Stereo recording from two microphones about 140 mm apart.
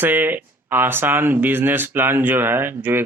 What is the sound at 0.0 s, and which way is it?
Speech, 15° right (ahead or behind).